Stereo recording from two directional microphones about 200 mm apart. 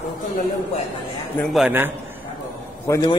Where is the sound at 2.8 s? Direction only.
15° left (ahead or behind).